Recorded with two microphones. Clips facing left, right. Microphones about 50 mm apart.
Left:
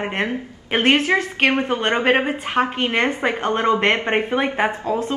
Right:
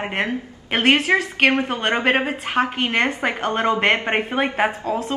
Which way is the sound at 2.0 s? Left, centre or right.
Centre.